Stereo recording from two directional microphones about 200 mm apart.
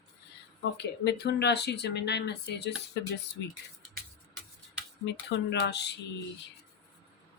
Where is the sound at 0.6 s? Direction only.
55° left (ahead or behind).